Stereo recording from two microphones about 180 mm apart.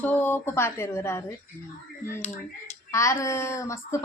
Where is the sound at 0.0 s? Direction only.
10° left (ahead or behind).